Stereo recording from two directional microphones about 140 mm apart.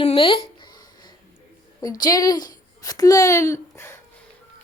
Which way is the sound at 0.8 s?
30° left (ahead or behind).